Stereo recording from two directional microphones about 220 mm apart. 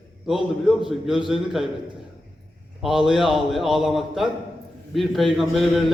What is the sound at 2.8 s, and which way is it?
A man's voice, centre (ahead or behind).